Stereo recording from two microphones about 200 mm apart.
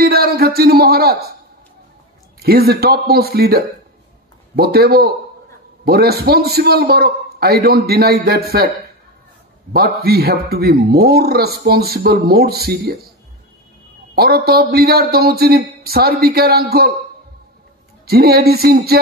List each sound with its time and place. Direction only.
0.0 s a sound: 50° right (ahead or behind)
2.4 s a man's voice: 50° right (ahead or behind)
9.7 s a man's voice: 50° right (ahead or behind)
14.1 s a man's voice: 50° right (ahead or behind)
18.0 s a man's voice: 50° right (ahead or behind)